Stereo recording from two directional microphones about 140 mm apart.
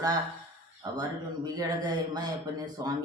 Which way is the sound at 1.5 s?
30° right (ahead or behind).